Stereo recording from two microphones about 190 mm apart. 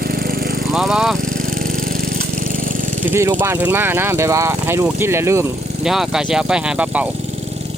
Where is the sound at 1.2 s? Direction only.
45° right (ahead or behind).